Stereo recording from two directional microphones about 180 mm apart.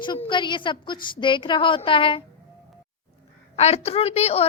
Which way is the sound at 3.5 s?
35° left (ahead or behind).